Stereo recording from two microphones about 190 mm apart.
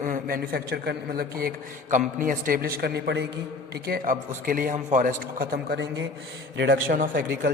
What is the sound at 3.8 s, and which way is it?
A man's voice, 50° right (ahead or behind).